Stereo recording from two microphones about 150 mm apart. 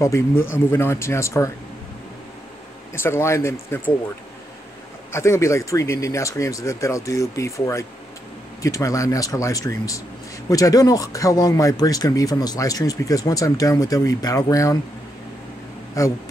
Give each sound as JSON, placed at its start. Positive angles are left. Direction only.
{"t": 0.0, "sound": "speech", "side_deg": 20}
{"t": 2.9, "sound": "speech", "side_deg": 15}
{"t": 5.1, "sound": "speech", "side_deg": 20}
{"t": 16.0, "sound": "speech", "side_deg": 20}